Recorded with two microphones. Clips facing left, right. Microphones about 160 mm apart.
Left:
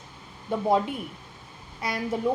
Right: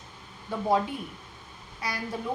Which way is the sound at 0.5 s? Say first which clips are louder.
Left 4 dB; 25° left (ahead or behind).